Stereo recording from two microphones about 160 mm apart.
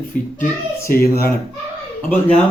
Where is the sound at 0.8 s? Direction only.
70° left (ahead or behind).